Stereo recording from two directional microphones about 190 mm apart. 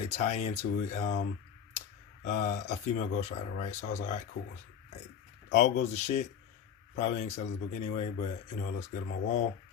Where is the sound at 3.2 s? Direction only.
40° left (ahead or behind).